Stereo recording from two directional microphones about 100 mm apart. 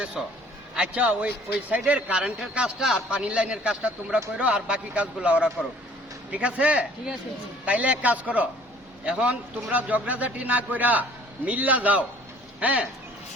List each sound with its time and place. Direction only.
0.2 s a man's voice: centre (ahead or behind)
0.8 s a man's voice: 10° right (ahead or behind)